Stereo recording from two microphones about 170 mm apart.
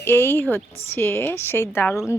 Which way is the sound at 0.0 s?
15° left (ahead or behind).